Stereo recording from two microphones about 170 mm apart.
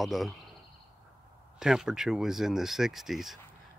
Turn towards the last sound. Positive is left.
turn(degrees=0)  # may be behind; listen again after turning